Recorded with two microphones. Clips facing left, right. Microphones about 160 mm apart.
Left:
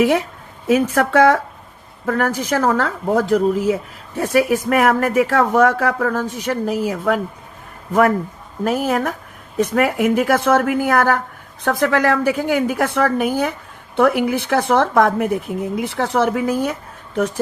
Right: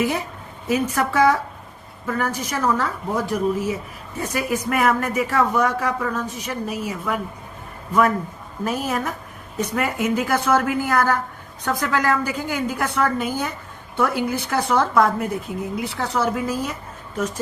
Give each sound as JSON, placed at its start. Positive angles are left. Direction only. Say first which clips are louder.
{"t": 0.0, "sound": "a woman's voice", "louder": "left 7 dB", "side_deg": 75}
{"t": 8.6, "sound": "a woman's voice", "louder": "left 5 dB", "side_deg": 75}